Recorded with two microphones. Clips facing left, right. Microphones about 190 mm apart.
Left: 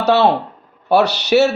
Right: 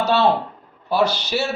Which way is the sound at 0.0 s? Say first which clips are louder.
Left 4 dB; 70° left (ahead or behind).